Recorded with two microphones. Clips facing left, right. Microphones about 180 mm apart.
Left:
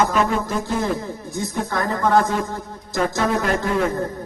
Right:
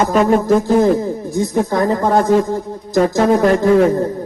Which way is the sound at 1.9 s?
35° right (ahead or behind).